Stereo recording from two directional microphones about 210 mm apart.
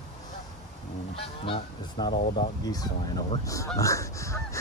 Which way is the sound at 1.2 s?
25° left (ahead or behind).